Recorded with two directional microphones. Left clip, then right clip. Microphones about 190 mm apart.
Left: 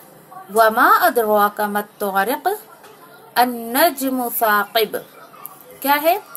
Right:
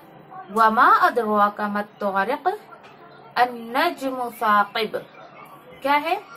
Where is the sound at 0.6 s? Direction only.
45° left (ahead or behind).